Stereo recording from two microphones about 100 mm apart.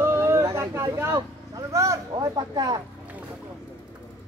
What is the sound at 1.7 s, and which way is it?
Speech, 30° right (ahead or behind).